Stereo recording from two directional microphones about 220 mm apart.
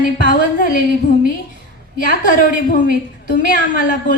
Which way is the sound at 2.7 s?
40° left (ahead or behind).